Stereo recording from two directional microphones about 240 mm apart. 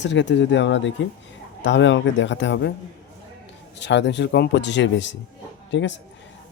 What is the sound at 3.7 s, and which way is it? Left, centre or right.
Speech, left.